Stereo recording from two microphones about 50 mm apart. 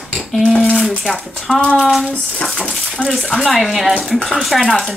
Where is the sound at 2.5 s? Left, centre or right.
Left.